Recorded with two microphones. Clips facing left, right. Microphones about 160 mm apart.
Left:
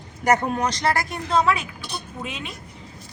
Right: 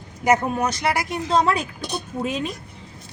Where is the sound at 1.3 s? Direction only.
35° right (ahead or behind).